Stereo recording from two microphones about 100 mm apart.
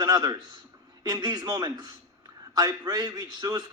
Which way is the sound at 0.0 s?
40° right (ahead or behind).